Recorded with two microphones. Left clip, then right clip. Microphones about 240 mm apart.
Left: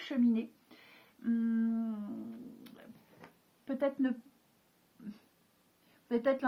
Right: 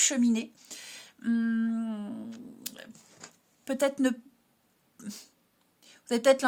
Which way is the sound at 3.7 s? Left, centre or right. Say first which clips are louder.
Right 6 dB; right.